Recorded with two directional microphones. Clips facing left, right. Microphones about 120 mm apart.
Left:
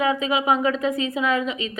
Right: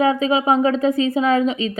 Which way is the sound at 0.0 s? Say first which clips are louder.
Right 5 dB; 35° right (ahead or behind).